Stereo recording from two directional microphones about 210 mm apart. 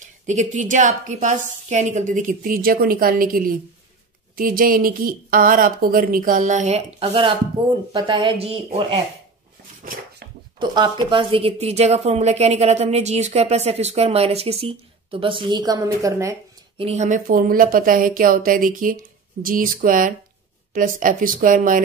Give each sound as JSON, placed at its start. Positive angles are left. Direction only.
{"t": 0.3, "sound": "a woman's voice", "side_deg": -35}
{"t": 10.6, "sound": "speech", "side_deg": -20}
{"t": 16.7, "sound": "speech", "side_deg": -30}